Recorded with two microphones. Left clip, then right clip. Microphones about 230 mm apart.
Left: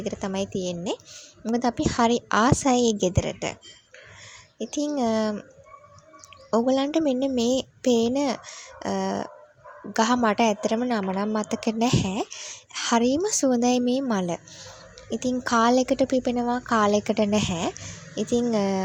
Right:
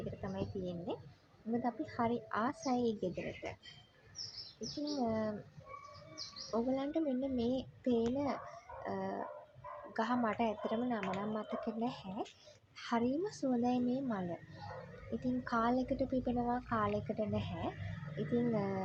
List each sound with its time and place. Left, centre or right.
0.2 s a woman's voice: left
4.9 s a woman's voice: left
6.5 s a woman's voice: left